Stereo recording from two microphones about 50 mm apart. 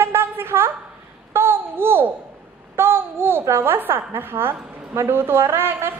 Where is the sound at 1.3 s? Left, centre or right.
Right.